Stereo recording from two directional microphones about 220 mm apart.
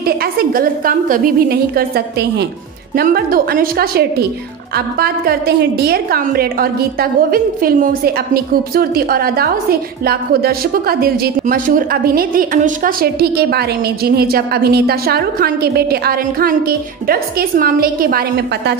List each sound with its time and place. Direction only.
0.0 s a woman's voice: 45° right (ahead or behind)